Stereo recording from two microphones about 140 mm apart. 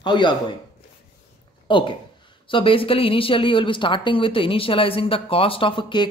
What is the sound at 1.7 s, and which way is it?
Speech, 35° left (ahead or behind).